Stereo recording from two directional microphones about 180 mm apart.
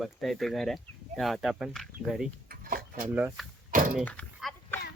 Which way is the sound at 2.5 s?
50° right (ahead or behind).